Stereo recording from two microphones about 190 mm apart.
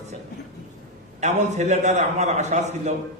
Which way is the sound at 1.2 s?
35° right (ahead or behind).